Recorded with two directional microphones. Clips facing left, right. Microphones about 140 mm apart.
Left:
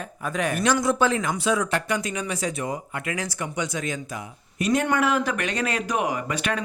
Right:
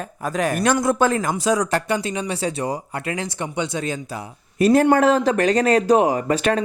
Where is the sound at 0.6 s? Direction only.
55° right (ahead or behind).